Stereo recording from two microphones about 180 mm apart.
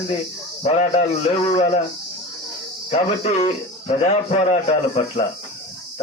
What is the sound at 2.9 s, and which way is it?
Speech, 35° left (ahead or behind).